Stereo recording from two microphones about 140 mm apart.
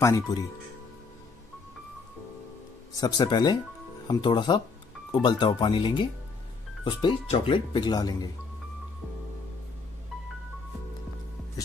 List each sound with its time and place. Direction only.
0.0 s speech: 25° left (ahead or behind)
3.0 s speech: 30° left (ahead or behind)